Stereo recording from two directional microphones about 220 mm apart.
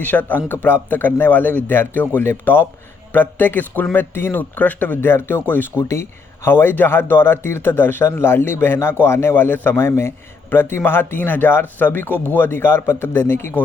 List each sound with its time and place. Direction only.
0.0 s a man's voice: 5° left (ahead or behind)